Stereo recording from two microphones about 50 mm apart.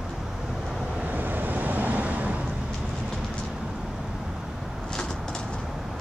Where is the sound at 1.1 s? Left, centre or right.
Right.